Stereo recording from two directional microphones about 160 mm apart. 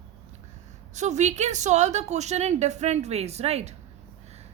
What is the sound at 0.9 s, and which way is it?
A woman's voice, 45° right (ahead or behind).